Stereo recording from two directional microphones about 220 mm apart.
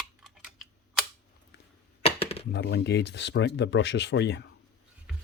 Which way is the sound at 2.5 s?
50° left (ahead or behind).